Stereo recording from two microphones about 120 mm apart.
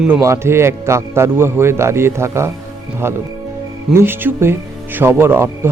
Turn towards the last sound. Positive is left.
turn(degrees=-20)  # may be behind; listen again after turning